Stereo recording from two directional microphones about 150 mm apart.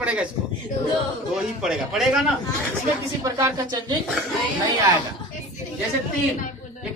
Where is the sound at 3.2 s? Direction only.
25° right (ahead or behind).